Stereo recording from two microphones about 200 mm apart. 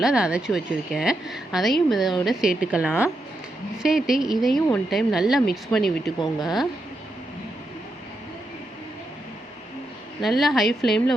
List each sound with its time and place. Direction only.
0.0 s a woman's voice: 5° right (ahead or behind)
6.1 s speech: 20° left (ahead or behind)
10.2 s a woman's voice: centre (ahead or behind)